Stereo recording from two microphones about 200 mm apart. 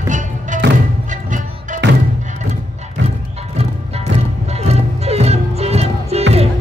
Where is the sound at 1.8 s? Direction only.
60° right (ahead or behind).